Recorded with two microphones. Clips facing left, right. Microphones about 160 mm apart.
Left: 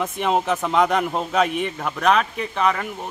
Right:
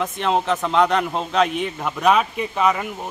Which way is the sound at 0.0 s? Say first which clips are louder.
Even; 10° left (ahead or behind).